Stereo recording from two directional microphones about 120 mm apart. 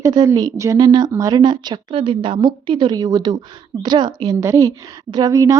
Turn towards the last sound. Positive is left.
turn(degrees=-30)  # may be behind; listen again after turning